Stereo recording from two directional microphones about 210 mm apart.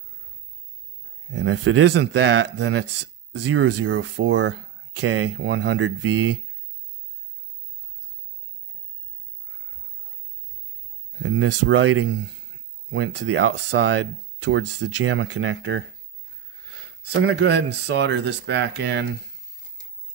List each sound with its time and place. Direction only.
1.3 s speech: 60° right (ahead or behind); by 6.4 s 90° right
11.2 s speech: 75° right (ahead or behind)
17.1 s speech: 55° right (ahead or behind)